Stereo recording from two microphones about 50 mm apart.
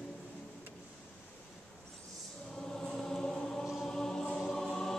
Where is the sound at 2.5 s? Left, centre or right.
Centre.